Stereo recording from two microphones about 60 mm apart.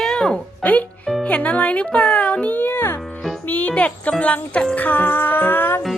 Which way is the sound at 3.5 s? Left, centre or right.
Left.